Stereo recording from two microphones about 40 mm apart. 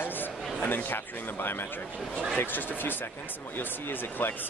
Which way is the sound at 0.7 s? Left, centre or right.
Left.